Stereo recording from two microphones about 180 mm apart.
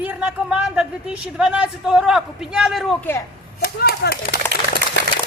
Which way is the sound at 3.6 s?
60° left (ahead or behind).